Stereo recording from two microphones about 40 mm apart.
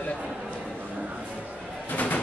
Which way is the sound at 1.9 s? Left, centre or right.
Left.